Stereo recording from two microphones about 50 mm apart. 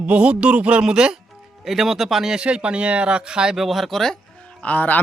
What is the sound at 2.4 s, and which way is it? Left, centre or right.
Speech, right.